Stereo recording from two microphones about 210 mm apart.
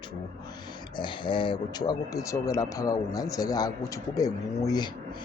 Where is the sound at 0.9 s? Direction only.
20° left (ahead or behind).